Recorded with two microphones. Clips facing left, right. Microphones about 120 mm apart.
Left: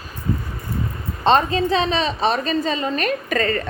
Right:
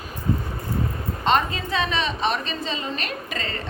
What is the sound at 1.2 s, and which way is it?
A woman's voice, 30° left (ahead or behind).